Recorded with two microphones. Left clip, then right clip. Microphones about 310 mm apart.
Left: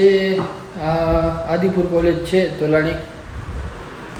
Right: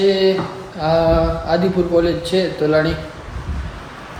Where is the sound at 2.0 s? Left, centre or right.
Centre.